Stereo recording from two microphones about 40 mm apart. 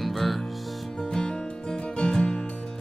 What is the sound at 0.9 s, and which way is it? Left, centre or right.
Music, centre.